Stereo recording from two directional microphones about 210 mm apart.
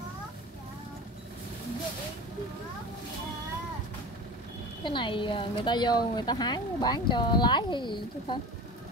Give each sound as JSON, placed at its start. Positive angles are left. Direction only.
{"t": 4.8, "sound": "speech", "side_deg": 25}